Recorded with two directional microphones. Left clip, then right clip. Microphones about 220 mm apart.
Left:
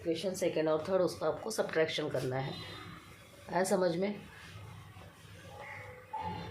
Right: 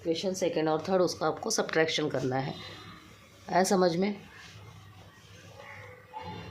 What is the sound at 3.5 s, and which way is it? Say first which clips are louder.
Speech: right 5 dB; 50° right (ahead or behind).